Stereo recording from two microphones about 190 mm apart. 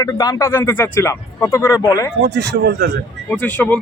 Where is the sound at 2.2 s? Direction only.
60° right (ahead or behind).